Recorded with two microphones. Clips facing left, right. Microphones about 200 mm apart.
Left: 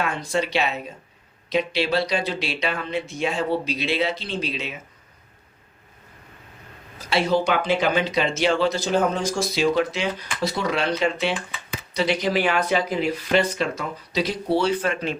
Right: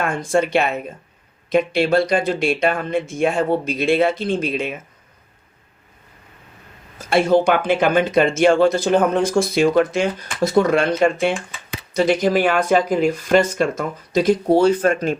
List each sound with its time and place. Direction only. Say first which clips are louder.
0.0 s speech: right 5 dB; 50° right (ahead or behind)
7.1 s speech: right 6 dB; 50° right (ahead or behind)